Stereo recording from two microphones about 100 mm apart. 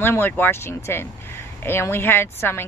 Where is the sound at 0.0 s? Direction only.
25° left (ahead or behind).